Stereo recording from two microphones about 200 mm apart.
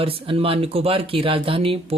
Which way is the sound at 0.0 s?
30° right (ahead or behind).